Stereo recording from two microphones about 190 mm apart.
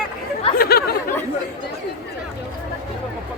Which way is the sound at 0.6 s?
55° left (ahead or behind).